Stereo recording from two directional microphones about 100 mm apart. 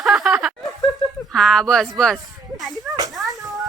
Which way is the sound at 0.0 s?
Centre (ahead or behind).